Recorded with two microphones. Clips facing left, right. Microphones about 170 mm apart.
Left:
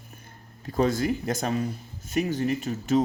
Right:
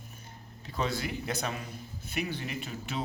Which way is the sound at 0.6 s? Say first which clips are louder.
Left 9 dB; 45° left (ahead or behind).